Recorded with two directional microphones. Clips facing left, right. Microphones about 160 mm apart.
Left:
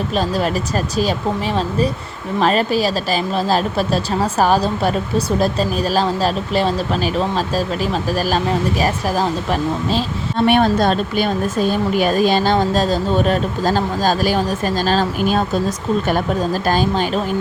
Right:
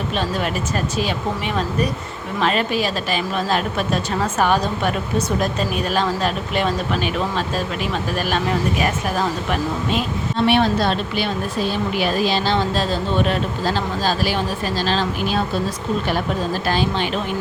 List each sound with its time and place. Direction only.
0.1 s a woman's voice: 35° left (ahead or behind)
10.3 s speech: 50° left (ahead or behind)
16.6 s a woman's voice: 45° left (ahead or behind)